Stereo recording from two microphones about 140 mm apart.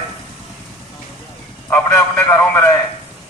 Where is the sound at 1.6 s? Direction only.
15° left (ahead or behind).